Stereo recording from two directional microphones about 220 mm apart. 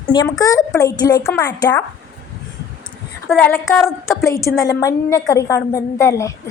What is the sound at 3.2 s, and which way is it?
Speech, centre (ahead or behind).